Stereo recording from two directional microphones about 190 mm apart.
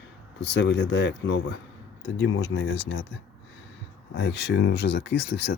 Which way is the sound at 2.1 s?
90° left.